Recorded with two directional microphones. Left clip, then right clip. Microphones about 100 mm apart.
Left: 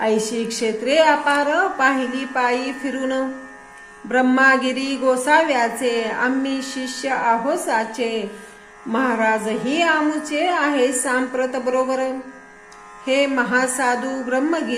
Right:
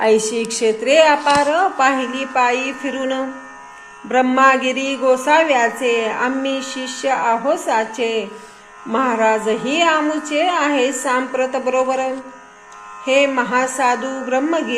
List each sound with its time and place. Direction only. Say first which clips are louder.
0.0 s a woman's voice: right 5 dB; 50° right (ahead or behind)